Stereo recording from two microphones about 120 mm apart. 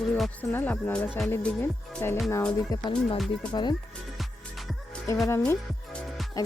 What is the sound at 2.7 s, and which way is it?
Speech, 30° left (ahead or behind).